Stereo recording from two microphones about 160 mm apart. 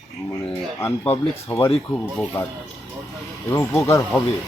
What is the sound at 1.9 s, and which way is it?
Speech, centre (ahead or behind).